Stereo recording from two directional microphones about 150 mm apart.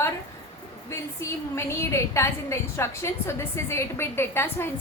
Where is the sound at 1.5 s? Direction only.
20° left (ahead or behind).